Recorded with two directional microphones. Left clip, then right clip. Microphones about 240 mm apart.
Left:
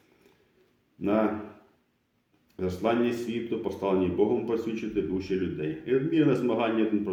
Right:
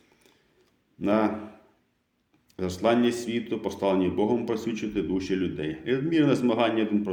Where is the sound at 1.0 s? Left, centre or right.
Right.